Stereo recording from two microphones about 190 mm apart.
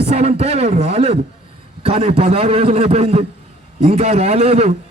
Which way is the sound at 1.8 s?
30° right (ahead or behind).